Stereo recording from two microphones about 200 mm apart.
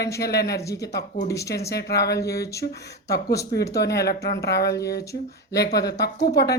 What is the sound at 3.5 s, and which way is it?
Speech, 55° left (ahead or behind).